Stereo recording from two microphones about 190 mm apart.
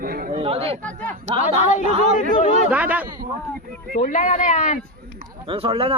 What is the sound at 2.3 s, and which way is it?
Speech, 40° left (ahead or behind).